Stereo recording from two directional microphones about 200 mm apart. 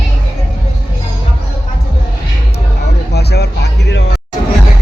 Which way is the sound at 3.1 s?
55° left (ahead or behind).